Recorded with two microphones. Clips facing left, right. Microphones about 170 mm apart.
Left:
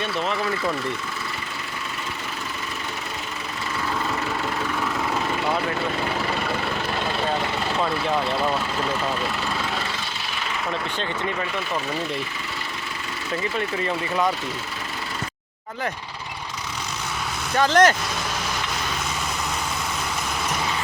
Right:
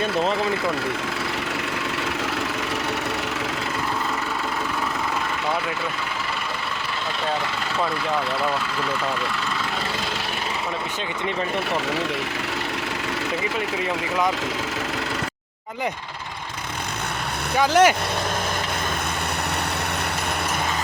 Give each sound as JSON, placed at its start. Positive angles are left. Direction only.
{"t": 17.6, "sound": "speech", "side_deg": -10}